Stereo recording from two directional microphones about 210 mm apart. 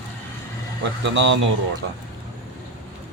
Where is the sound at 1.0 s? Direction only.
60° right (ahead or behind).